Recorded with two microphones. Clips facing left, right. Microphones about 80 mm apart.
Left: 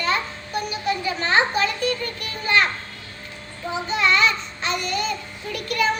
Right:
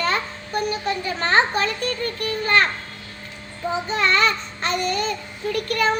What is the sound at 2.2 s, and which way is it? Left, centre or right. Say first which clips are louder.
Children playing: right 2 dB; right.